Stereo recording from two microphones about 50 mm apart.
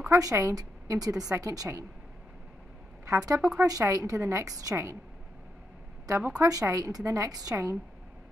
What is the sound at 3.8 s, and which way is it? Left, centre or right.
Speech, right.